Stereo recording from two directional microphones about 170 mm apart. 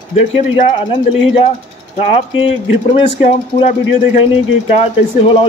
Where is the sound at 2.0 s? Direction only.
30° left (ahead or behind).